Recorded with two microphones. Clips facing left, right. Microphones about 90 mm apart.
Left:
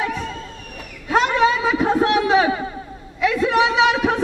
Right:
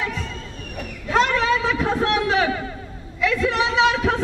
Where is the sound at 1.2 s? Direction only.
20° left (ahead or behind).